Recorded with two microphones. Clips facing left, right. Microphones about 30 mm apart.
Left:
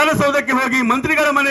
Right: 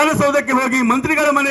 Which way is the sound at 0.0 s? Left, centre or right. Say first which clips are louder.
Even; centre.